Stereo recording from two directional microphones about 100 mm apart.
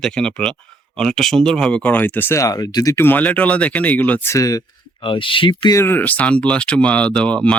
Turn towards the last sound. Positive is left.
turn(degrees=10)  # may be behind; listen again after turning